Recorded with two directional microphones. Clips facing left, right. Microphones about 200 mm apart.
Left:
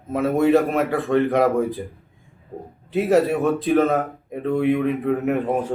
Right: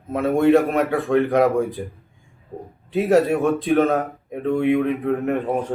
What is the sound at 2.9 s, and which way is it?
Mantra, centre (ahead or behind).